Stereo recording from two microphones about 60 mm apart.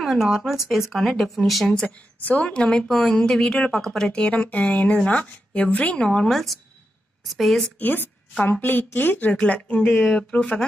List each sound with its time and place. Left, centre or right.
0.0 s speech: centre
1.7 s a woman's voice: left; by 4.1 s centre
4.1 s a woman's voice: left
6.0 s speech: centre
7.8 s a woman's voice: left